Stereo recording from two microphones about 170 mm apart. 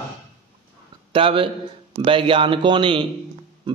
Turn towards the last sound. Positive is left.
turn(degrees=-30)  # may be behind; listen again after turning